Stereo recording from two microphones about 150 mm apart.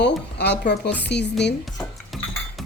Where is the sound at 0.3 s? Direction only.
90° left.